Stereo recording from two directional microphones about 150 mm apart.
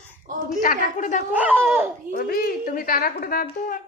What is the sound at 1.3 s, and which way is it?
Speech, 10° right (ahead or behind).